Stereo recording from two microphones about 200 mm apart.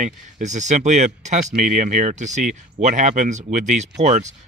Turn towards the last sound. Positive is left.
turn(degrees=-35)  # may be behind; listen again after turning